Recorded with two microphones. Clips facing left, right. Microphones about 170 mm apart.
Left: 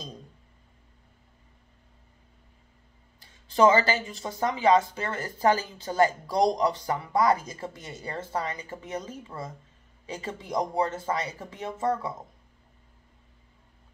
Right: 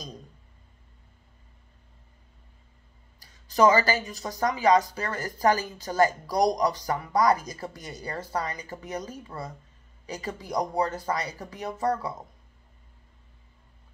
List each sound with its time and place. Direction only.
3.2 s speech: 25° left (ahead or behind)